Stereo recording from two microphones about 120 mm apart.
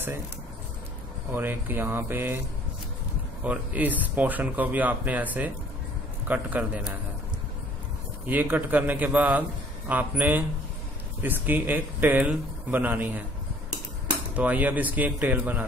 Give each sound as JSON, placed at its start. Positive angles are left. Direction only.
{"t": 1.3, "sound": "speech", "side_deg": -15}
{"t": 3.4, "sound": "speech", "side_deg": -15}
{"t": 8.3, "sound": "speech", "side_deg": -15}
{"t": 14.3, "sound": "speech", "side_deg": -10}